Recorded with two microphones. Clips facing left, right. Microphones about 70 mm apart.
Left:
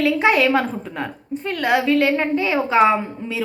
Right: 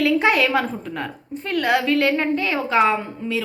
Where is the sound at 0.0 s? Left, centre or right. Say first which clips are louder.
Left 1 dB; centre.